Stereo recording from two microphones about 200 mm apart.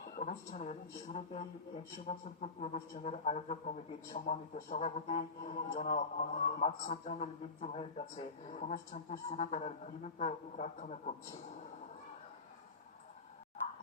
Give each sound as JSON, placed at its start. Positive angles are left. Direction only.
{"t": 0.0, "sound": "speech", "side_deg": 35}